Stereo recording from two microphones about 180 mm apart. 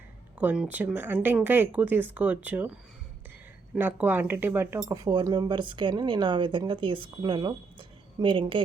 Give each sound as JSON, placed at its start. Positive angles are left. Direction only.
{"t": 0.3, "sound": "speech", "side_deg": -5}
{"t": 3.8, "sound": "speech", "side_deg": -10}